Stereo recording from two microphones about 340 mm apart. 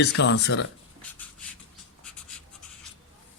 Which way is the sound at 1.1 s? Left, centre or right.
Centre.